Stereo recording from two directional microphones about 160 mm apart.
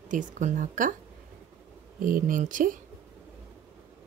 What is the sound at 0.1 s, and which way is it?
Speech, 55° right (ahead or behind).